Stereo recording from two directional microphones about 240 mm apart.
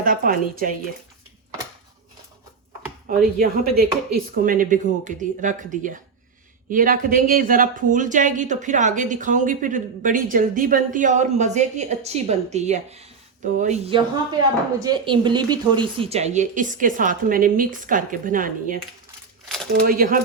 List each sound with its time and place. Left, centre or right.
0.0 s speech: right
3.1 s speech: right
14.8 s speech: centre; by 18.8 s right
19.5 s a sound: centre
19.8 s speech: right